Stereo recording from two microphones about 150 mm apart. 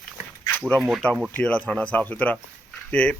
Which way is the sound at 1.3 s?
10° left (ahead or behind).